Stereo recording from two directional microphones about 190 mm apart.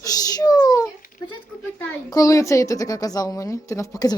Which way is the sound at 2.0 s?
20° left (ahead or behind).